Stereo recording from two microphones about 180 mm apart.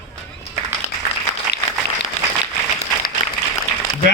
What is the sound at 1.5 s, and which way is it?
Applause, 65° left (ahead or behind).